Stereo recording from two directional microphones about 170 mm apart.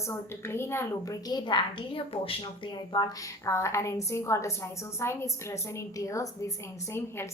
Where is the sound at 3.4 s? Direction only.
15° left (ahead or behind).